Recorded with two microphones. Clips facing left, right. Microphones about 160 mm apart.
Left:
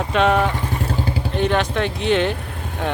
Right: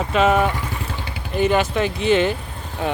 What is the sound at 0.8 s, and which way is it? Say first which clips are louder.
Vehicle: left 7 dB; 40° left (ahead or behind).